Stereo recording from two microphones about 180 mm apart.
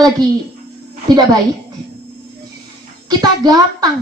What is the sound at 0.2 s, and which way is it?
A woman's voice, 25° right (ahead or behind).